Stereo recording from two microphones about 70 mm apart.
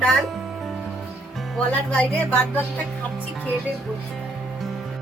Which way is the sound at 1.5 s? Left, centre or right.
Centre.